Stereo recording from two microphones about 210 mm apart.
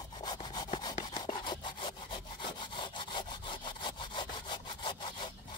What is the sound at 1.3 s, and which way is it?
Sawing, 20° left (ahead or behind).